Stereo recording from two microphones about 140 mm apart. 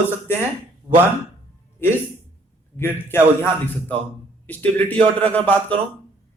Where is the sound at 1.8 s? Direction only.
15° left (ahead or behind).